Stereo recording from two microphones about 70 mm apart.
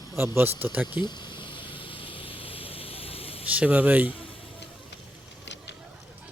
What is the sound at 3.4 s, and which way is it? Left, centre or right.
Speech, right.